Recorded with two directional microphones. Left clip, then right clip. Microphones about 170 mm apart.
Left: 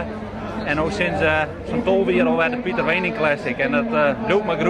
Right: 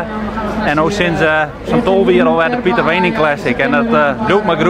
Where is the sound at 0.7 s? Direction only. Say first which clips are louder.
Right 7 dB; 20° right (ahead or behind).